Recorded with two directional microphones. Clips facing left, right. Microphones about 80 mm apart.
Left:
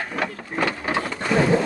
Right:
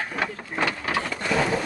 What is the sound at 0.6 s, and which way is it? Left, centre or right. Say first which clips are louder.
Printer: left 2 dB; left.